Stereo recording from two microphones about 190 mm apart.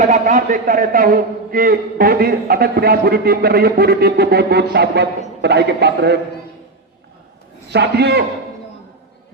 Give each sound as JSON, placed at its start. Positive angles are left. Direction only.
{"t": 0.0, "sound": "a man's voice", "side_deg": -40}
{"t": 7.7, "sound": "a man's voice", "side_deg": -60}